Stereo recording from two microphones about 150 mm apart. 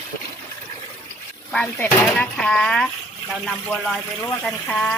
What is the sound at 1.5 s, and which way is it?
Speech, 10° left (ahead or behind).